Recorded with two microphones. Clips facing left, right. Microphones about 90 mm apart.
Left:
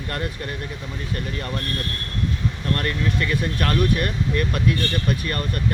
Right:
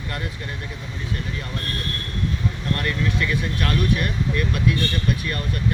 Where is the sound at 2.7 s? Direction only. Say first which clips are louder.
Even; 40° left (ahead or behind).